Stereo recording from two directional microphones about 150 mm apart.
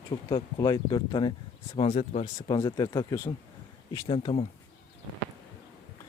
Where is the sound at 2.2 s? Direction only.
25° left (ahead or behind).